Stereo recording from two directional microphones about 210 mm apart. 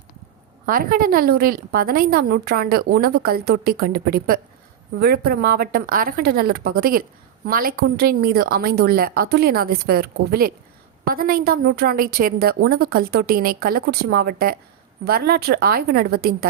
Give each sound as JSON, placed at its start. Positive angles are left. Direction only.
{"t": 0.7, "sound": "a woman's voice", "side_deg": -45}